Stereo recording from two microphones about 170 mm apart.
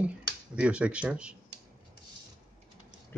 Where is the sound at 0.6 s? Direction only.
5° right (ahead or behind).